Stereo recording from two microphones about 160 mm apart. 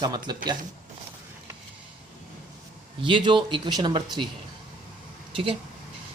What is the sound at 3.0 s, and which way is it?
Speech, 30° right (ahead or behind).